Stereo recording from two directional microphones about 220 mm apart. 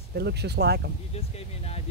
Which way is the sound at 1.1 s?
30° left (ahead or behind).